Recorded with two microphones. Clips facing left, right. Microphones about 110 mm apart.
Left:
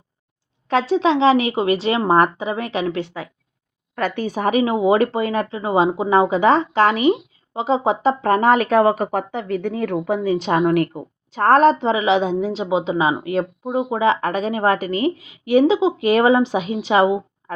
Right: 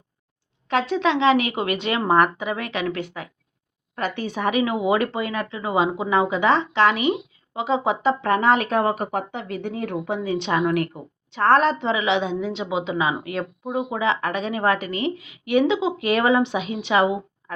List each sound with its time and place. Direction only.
0.7 s speech: 35° left (ahead or behind)
3.9 s speech: 45° left (ahead or behind)